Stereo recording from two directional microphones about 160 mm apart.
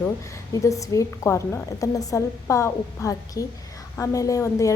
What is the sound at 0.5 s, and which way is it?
A woman's voice, 20° left (ahead or behind).